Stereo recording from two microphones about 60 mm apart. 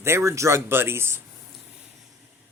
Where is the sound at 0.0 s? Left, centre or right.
Right.